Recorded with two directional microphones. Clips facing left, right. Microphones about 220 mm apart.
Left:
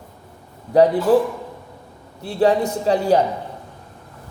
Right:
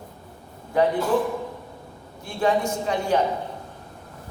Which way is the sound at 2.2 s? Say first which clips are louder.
Left 5 dB; 35° left (ahead or behind).